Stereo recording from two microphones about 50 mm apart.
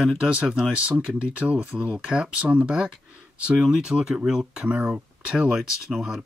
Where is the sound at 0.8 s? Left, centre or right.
Right; by 4.6 s centre.